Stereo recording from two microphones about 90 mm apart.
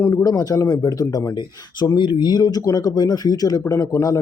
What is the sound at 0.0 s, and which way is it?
Speech, 35° left (ahead or behind).